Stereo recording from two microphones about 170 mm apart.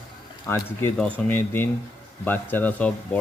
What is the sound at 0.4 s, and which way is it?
Speech, 15° left (ahead or behind).